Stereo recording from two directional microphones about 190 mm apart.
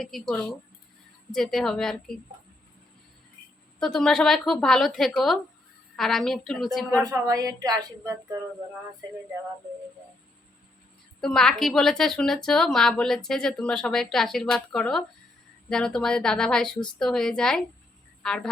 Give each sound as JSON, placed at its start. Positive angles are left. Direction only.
{"t": 0.0, "sound": "a woman's voice", "side_deg": 0}
{"t": 3.8, "sound": "a woman's voice", "side_deg": 5}
{"t": 7.0, "sound": "a woman's voice", "side_deg": -20}
{"t": 11.2, "sound": "a woman's voice", "side_deg": 5}